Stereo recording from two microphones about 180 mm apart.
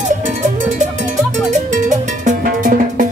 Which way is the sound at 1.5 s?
40° right (ahead or behind).